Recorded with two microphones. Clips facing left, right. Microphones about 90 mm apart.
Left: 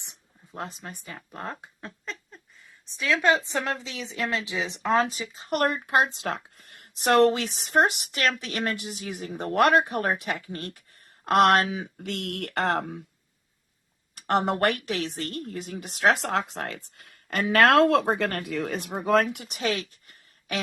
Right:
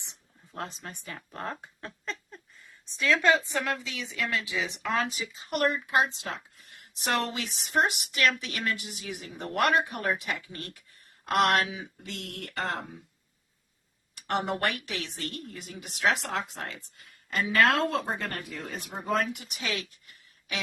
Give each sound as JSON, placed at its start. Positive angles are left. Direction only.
{"t": 0.9, "sound": "speech", "side_deg": 15}
{"t": 3.2, "sound": "a woman's voice", "side_deg": 20}
{"t": 14.3, "sound": "a woman's voice", "side_deg": 45}
{"t": 16.6, "sound": "speech", "side_deg": 60}
{"t": 19.5, "sound": "speech", "side_deg": 40}